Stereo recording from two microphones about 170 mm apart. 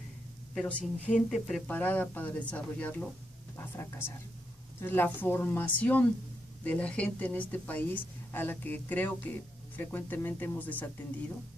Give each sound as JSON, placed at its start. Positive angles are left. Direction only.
{"t": 0.6, "sound": "speech", "side_deg": 10}